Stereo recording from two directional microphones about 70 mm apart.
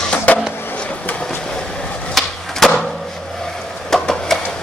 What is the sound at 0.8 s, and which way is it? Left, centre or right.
Vehicle, centre.